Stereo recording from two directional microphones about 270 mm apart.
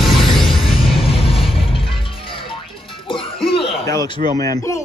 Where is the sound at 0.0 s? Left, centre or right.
Centre.